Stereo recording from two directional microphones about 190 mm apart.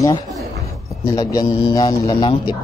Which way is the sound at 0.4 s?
15° left (ahead or behind).